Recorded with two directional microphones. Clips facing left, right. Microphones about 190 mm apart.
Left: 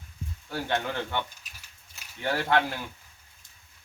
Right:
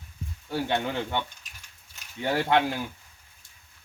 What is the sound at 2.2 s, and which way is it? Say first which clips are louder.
Speech: right 2 dB; 15° right (ahead or behind).